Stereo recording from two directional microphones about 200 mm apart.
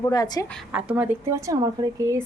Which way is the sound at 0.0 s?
20° left (ahead or behind).